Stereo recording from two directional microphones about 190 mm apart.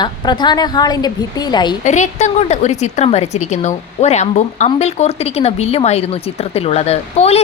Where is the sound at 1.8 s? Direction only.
40° left (ahead or behind).